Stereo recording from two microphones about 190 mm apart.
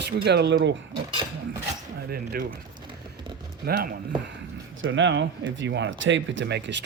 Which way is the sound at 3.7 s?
55° right (ahead or behind).